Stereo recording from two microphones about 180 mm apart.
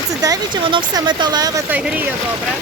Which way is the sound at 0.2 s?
20° right (ahead or behind).